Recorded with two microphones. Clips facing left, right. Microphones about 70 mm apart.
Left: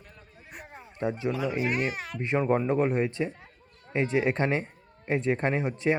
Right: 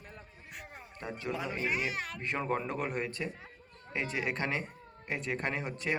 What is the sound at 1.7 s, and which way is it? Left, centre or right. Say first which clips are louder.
Speech: left 5 dB; left.